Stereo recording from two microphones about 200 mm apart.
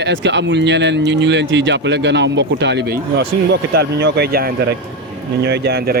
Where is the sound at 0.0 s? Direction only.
65° right (ahead or behind).